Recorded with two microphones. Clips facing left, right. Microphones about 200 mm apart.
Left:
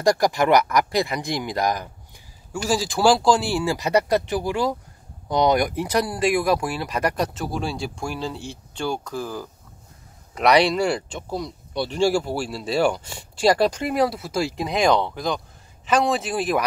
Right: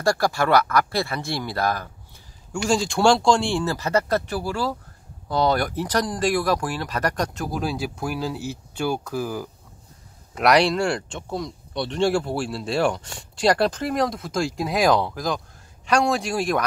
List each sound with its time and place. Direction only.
0.0 s speech: 15° left (ahead or behind)
2.5 s speech: 5° left (ahead or behind)